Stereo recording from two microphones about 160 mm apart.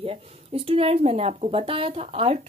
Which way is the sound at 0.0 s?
35° right (ahead or behind).